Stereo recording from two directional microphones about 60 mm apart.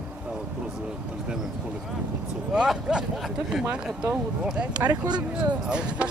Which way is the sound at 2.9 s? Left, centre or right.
Centre.